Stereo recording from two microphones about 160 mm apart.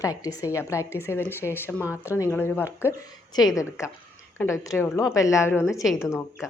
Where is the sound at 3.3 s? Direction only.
20° left (ahead or behind).